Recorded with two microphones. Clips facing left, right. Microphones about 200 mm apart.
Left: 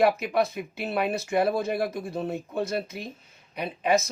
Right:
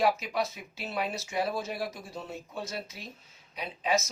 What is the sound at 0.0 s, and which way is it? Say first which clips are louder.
Speech: left 6 dB; 60° left (ahead or behind).